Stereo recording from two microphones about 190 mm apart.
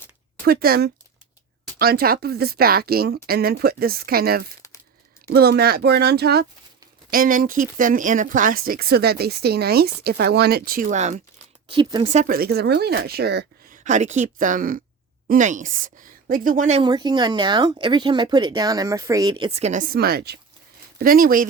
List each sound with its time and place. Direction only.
0.4 s a woman's voice: 55° right (ahead or behind)
11.7 s speech: 25° right (ahead or behind)
12.1 s a woman's voice: 45° right (ahead or behind)
13.8 s speech: 40° right (ahead or behind)
16.8 s speech: 20° right (ahead or behind); by 21.4 s 50° right (ahead or behind)